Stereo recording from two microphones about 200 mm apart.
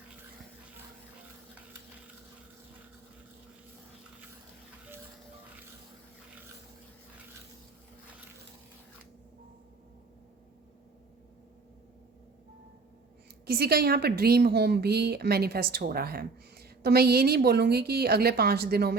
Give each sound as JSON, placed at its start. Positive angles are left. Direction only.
{"t": 13.4, "sound": "a woman's voice", "side_deg": -50}